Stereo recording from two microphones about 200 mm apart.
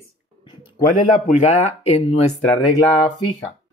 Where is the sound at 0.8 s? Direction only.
40° left (ahead or behind).